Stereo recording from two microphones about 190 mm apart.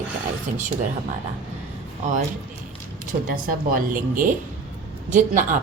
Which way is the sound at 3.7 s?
45° right (ahead or behind).